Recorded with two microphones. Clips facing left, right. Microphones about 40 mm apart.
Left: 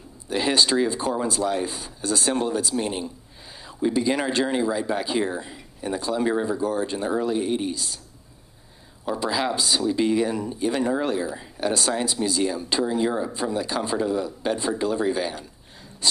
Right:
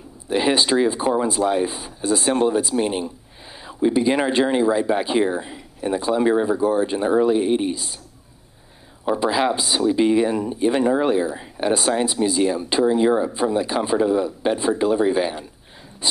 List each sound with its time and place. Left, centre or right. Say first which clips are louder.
0.3 s speech: right 3 dB; centre
9.0 s speech: right 5 dB; right
16.0 s a sound: even; right